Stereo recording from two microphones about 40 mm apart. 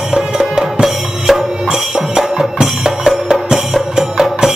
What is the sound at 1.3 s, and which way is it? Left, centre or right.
Music, centre.